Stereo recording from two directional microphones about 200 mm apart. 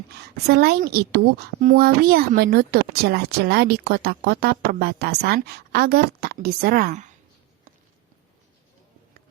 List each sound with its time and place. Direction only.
0.4 s a woman's voice: 50° right (ahead or behind)